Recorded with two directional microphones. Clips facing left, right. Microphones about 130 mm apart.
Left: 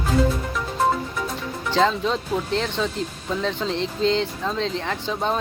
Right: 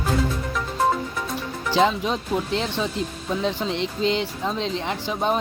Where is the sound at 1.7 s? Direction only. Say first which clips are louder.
Even; 15° right (ahead or behind).